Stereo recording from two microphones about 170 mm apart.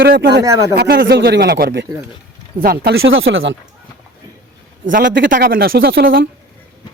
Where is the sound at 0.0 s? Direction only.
65° right (ahead or behind).